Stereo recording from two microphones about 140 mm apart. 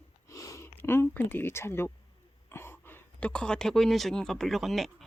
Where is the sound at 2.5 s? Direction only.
15° left (ahead or behind).